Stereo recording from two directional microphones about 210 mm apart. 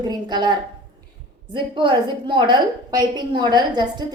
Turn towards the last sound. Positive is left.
turn(degrees=-20)  # may be behind; listen again after turning